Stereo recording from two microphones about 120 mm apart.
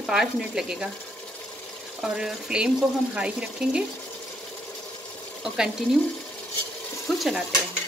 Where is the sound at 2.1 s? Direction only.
5° right (ahead or behind).